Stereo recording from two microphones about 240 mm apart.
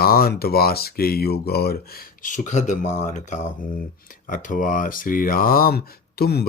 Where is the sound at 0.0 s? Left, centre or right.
Left.